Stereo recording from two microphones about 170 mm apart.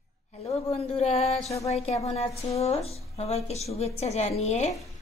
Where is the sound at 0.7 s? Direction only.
35° left (ahead or behind).